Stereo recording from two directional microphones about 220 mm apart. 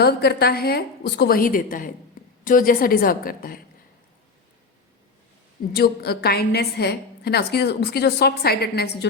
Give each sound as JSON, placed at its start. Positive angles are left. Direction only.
{"t": 0.0, "sound": "a woman's voice", "side_deg": 45}
{"t": 5.7, "sound": "a woman's voice", "side_deg": 45}